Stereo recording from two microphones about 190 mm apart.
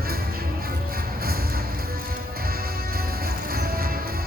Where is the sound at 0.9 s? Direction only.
50° right (ahead or behind).